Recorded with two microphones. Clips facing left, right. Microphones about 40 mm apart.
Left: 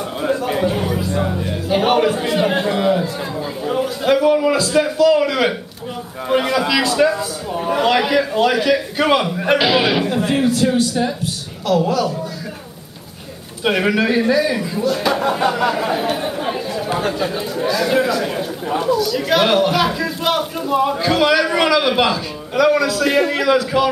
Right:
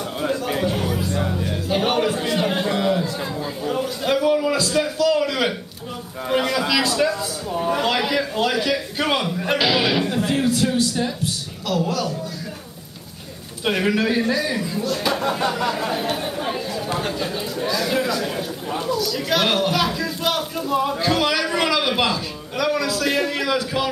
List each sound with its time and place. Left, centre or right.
0.2 s a sound: centre
0.7 s music: centre
3.6 s a man's voice: centre
13.7 s a man's voice: centre